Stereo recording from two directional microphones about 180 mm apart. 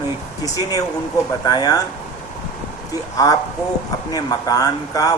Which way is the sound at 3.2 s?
20° left (ahead or behind).